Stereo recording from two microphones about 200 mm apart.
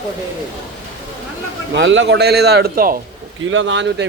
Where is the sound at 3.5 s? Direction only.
65° right (ahead or behind).